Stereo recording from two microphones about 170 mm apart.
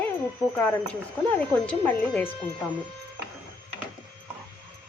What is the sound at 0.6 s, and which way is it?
Speech, 10° left (ahead or behind).